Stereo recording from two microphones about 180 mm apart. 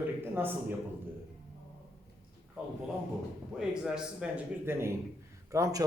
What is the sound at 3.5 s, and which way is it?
Speech, 5° right (ahead or behind).